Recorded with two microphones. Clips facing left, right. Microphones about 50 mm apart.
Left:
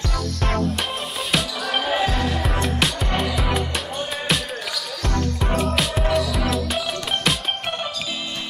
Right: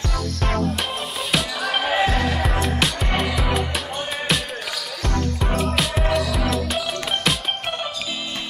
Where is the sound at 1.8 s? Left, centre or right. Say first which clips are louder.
Right 2 dB; centre.